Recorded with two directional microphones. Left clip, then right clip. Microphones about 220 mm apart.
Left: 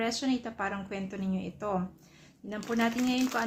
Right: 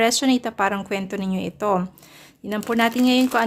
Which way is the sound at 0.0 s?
50° right (ahead or behind).